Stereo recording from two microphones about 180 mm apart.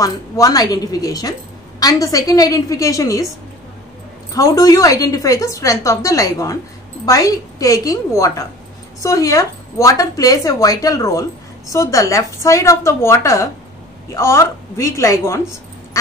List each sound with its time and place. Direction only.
0.0 s speech: 20° left (ahead or behind)
4.3 s a woman's voice: 20° left (ahead or behind)